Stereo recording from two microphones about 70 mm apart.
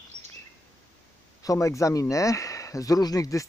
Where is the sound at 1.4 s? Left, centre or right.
Left.